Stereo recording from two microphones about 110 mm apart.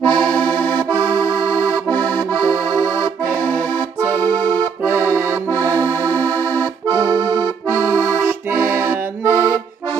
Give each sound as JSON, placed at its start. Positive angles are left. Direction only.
{"t": 0.0, "sound": "accordion", "side_deg": 10}
{"t": 4.2, "sound": "accordion", "side_deg": 15}
{"t": 4.8, "sound": "accordion", "side_deg": -20}
{"t": 5.5, "sound": "accordion", "side_deg": 20}
{"t": 6.9, "sound": "accordion", "side_deg": -35}
{"t": 7.7, "sound": "accordion", "side_deg": -25}
{"t": 8.3, "sound": "music", "side_deg": -20}